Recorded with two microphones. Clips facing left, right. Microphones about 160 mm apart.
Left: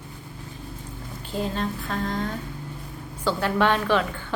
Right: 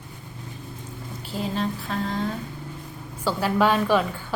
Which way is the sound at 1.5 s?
Centre (ahead or behind).